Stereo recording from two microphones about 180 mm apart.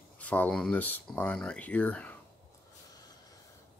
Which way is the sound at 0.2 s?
10° left (ahead or behind).